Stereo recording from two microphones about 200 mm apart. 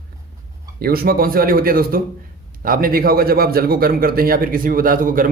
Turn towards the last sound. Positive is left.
turn(degrees=-45)  # may be behind; listen again after turning